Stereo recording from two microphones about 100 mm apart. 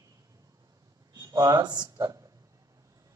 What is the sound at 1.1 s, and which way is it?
Speech, 40° right (ahead or behind).